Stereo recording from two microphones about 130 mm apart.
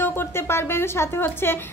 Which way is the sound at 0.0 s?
15° left (ahead or behind).